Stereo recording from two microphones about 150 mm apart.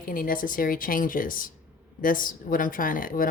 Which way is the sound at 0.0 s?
70° left (ahead or behind).